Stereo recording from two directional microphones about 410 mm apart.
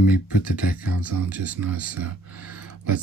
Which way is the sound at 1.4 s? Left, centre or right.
Right.